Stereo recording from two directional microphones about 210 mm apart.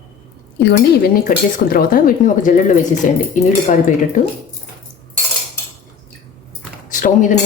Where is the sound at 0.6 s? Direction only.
50° left (ahead or behind).